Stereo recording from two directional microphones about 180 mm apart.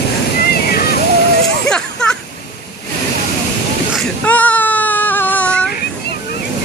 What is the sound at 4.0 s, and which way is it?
Baby cry, 10° left (ahead or behind).